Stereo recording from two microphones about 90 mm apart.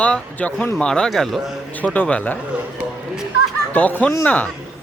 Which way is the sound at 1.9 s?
15° left (ahead or behind).